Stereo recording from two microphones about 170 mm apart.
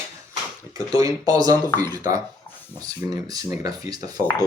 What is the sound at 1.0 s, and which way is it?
Speech, 20° right (ahead or behind).